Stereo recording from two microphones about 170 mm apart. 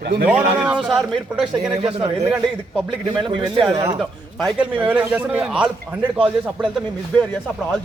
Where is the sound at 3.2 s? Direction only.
30° right (ahead or behind).